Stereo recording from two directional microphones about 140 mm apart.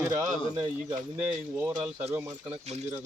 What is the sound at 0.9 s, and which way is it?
Speech, 15° right (ahead or behind).